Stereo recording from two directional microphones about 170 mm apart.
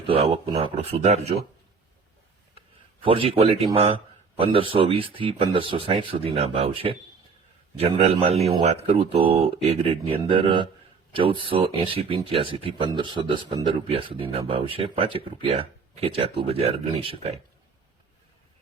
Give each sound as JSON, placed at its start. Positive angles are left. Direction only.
{"t": 0.1, "sound": "speech", "side_deg": -35}
{"t": 3.0, "sound": "a man's voice", "side_deg": -30}